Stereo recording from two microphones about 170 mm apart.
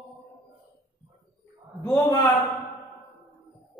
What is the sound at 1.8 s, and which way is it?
Speech, 15° left (ahead or behind).